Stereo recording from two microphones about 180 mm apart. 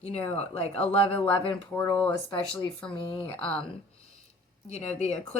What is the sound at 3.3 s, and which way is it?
Speech, 5° left (ahead or behind).